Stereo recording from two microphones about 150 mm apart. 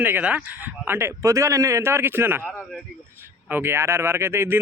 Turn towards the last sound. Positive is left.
turn(degrees=-15)  # may be behind; listen again after turning